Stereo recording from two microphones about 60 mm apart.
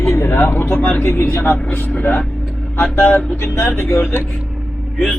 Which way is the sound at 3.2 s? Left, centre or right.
Left.